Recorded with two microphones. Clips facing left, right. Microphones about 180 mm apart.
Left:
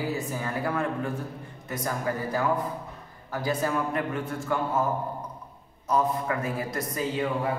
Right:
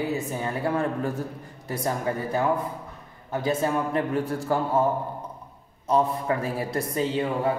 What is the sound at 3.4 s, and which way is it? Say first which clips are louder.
A man's voice: right 2 dB; 25° right (ahead or behind).